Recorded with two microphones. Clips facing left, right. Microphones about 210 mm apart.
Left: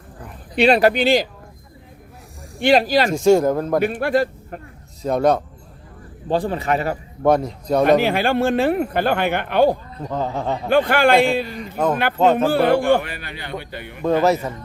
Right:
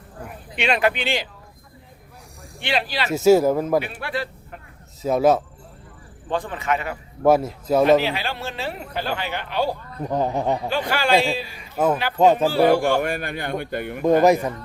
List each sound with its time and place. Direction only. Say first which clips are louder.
0.5 s speech: left 7 dB; 35° left (ahead or behind)
2.6 s speech: left 10 dB; 40° left (ahead or behind)
3.1 s speech: right 3 dB; 5° right (ahead or behind)
3.8 s speech: left 7 dB; 45° left (ahead or behind)
5.0 s speech: even; 5° right (ahead or behind)
6.2 s speech: left 4 dB; 35° left (ahead or behind)
7.3 s speech: even; 5° right (ahead or behind)
8.0 s speech: left 9 dB; 50° left (ahead or behind)
10.0 s speech: right 2 dB; 15° right (ahead or behind)
10.7 s speech: left 9 dB; 55° left (ahead or behind)
11.4 s speech: even; 5° right (ahead or behind)
12.5 s speech: left 2 dB; 55° left (ahead or behind)
13.0 s a man's voice: right 7 dB; 45° right (ahead or behind)
14.0 s speech: right 1 dB; 15° right (ahead or behind)